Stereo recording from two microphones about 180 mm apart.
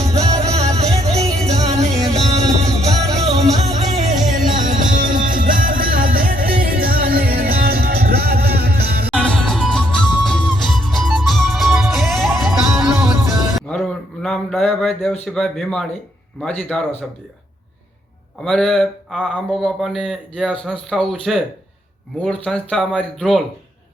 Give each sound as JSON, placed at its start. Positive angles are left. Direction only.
{"t": 0.0, "sound": "music", "side_deg": -35}
{"t": 9.1, "sound": "music", "side_deg": 5}
{"t": 15.4, "sound": "speech", "side_deg": 0}
{"t": 18.4, "sound": "speech", "side_deg": 0}